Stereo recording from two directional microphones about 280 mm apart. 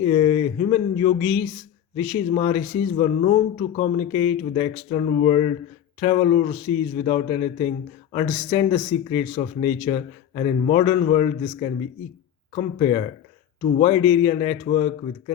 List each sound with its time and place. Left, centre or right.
0.0 s speech: centre